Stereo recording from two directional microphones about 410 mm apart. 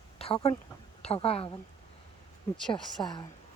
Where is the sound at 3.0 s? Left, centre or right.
Centre.